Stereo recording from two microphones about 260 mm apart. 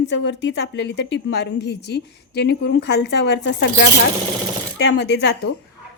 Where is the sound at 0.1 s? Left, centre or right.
Left.